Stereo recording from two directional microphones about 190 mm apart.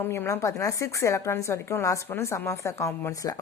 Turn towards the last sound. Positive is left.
turn(degrees=15)  # may be behind; listen again after turning